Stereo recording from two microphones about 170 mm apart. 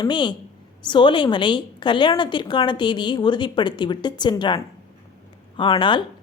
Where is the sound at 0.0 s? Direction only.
25° left (ahead or behind).